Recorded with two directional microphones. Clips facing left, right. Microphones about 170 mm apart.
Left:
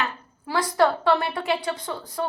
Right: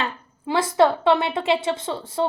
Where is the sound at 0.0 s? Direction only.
25° right (ahead or behind).